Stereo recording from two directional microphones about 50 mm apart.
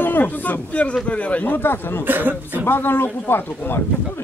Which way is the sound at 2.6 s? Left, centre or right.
Left.